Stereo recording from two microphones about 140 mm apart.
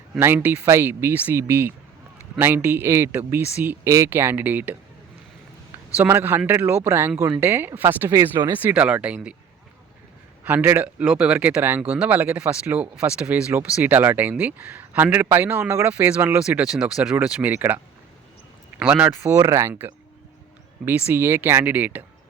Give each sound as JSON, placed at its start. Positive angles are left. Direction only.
{"t": 0.2, "sound": "speech", "side_deg": -15}
{"t": 6.0, "sound": "speech", "side_deg": -15}
{"t": 10.4, "sound": "speech", "side_deg": -15}
{"t": 18.8, "sound": "speech", "side_deg": -10}
{"t": 21.1, "sound": "speech", "side_deg": -15}